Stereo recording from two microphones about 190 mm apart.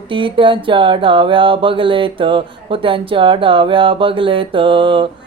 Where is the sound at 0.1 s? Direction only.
25° right (ahead or behind).